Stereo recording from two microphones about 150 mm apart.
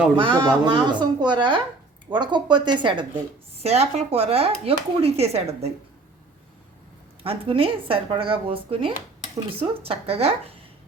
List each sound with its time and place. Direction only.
0.2 s speech: 35° right (ahead or behind)
3.5 s speech: 45° right (ahead or behind)
7.2 s speech: 40° right (ahead or behind)